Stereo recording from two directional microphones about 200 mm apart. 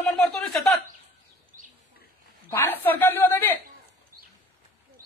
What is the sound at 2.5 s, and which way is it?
A man's voice, 10° left (ahead or behind).